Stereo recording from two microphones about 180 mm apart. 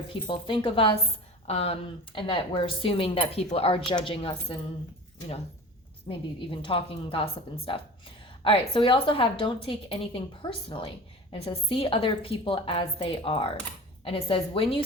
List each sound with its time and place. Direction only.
0.1 s speech: 30° left (ahead or behind)
6.1 s a woman's voice: 30° left (ahead or behind)